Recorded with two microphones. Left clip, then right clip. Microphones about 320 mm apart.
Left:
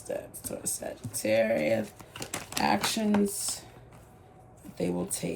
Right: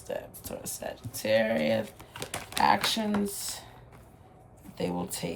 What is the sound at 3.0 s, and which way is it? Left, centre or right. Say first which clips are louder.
Speech: left 3 dB; right.